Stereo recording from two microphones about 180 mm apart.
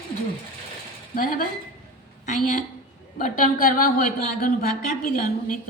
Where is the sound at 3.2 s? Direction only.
45° left (ahead or behind).